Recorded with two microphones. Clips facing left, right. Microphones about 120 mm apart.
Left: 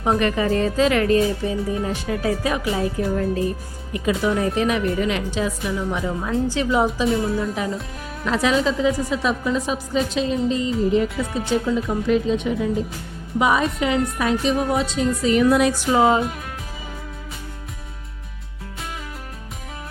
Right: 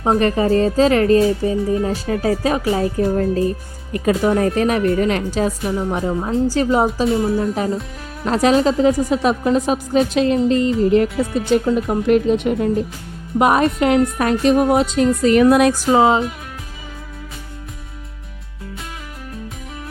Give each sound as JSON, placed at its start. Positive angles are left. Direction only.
{"t": 0.0, "sound": "speech", "side_deg": -35}
{"t": 4.2, "sound": "speech", "side_deg": -50}
{"t": 6.8, "sound": "a woman's voice", "side_deg": -30}
{"t": 15.7, "sound": "speech", "side_deg": -30}